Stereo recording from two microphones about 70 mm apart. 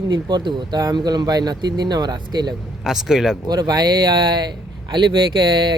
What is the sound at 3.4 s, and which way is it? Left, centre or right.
Speech, right.